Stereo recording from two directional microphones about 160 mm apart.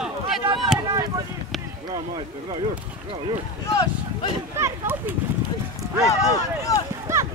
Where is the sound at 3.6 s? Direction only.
20° left (ahead or behind).